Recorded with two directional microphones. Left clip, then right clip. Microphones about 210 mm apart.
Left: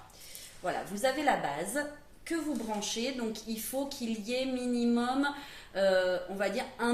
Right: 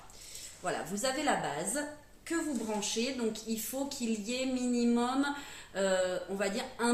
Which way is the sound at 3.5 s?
5° right (ahead or behind).